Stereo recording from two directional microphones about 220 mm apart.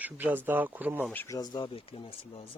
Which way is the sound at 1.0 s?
10° left (ahead or behind).